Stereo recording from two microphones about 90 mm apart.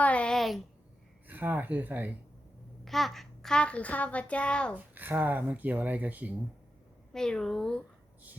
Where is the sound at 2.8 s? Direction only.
Centre (ahead or behind).